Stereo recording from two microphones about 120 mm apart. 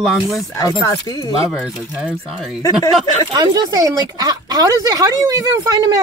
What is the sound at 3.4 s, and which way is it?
Speech, 30° right (ahead or behind).